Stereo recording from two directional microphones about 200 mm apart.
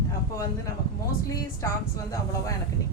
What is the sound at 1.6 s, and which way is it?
Speech, 15° left (ahead or behind).